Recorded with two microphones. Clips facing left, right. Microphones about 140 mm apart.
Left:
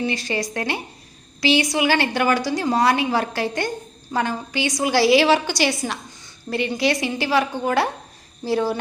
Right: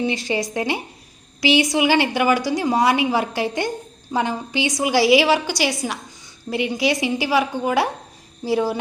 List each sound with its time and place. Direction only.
0.0 s a woman's voice: 20° right (ahead or behind)